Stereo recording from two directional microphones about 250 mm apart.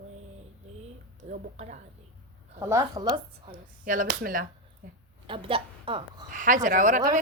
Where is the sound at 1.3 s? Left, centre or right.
Right.